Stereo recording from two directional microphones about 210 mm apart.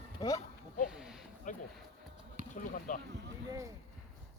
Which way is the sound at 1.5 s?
35° left (ahead or behind).